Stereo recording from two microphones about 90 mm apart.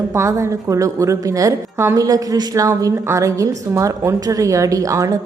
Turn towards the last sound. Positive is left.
turn(degrees=-40)  # may be behind; listen again after turning